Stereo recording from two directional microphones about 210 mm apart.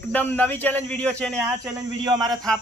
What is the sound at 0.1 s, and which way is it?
Speech, 10° left (ahead or behind).